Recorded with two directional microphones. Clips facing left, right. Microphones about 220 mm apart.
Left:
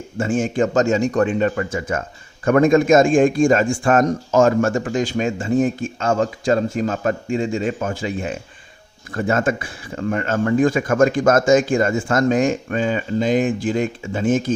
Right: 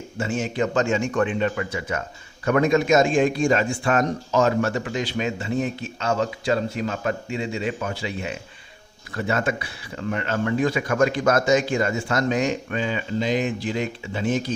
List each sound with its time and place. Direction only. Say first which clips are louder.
0.2 s a man's voice: left 5 dB; 50° left (ahead or behind)